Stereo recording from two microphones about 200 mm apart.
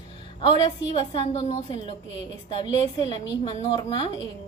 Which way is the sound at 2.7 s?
25° left (ahead or behind).